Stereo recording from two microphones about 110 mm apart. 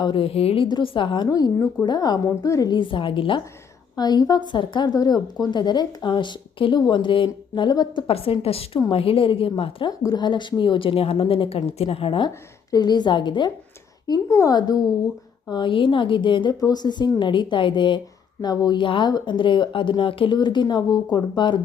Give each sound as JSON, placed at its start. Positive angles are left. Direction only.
{"t": 0.0, "sound": "a woman's voice", "side_deg": 55}
{"t": 0.7, "sound": "a woman's voice", "side_deg": 45}
{"t": 2.7, "sound": "speech", "side_deg": 50}
{"t": 3.9, "sound": "speech", "side_deg": 40}
{"t": 8.0, "sound": "a woman's voice", "side_deg": 60}
{"t": 10.0, "sound": "speech", "side_deg": 35}
{"t": 12.7, "sound": "speech", "side_deg": 40}
{"t": 14.1, "sound": "a woman's voice", "side_deg": 30}
{"t": 15.4, "sound": "speech", "side_deg": 45}
{"t": 16.6, "sound": "speech", "side_deg": 35}